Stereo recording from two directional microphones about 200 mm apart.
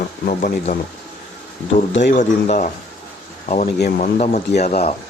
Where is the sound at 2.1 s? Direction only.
35° left (ahead or behind).